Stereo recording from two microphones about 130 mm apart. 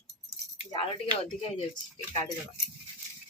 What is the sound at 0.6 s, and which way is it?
Speech, 50° left (ahead or behind).